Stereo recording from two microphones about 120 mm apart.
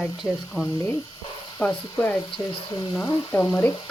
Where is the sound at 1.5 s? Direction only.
15° left (ahead or behind).